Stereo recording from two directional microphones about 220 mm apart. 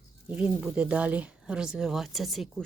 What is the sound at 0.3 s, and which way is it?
Speech, 5° right (ahead or behind).